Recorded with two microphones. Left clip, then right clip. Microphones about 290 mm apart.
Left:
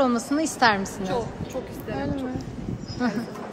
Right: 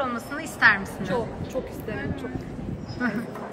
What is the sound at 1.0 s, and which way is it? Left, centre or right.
A woman's voice, centre.